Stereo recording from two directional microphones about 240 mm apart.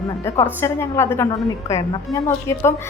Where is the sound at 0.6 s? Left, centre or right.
Centre.